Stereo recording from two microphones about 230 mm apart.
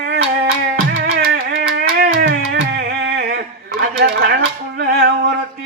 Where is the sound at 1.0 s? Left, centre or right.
Right.